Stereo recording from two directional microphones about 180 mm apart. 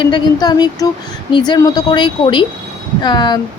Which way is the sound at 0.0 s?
25° left (ahead or behind).